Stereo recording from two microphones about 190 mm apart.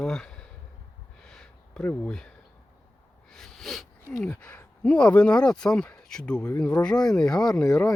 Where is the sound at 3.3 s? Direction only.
Centre (ahead or behind).